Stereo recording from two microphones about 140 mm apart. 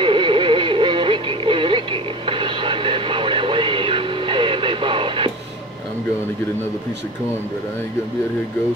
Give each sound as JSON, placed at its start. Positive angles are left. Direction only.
{"t": 0.0, "sound": "music", "side_deg": -35}